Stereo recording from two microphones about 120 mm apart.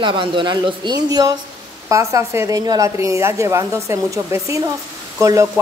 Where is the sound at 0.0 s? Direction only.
40° right (ahead or behind).